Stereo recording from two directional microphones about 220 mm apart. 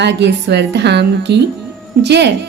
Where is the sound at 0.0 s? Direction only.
50° right (ahead or behind).